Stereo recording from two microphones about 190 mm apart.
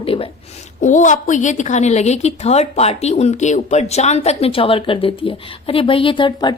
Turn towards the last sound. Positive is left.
turn(degrees=25)  # may be behind; listen again after turning